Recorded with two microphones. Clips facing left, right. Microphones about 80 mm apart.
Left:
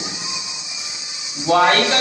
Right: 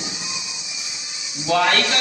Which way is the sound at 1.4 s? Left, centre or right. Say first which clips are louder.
Left 4 dB; left.